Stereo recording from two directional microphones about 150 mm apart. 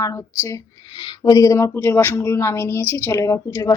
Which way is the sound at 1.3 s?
20° left (ahead or behind).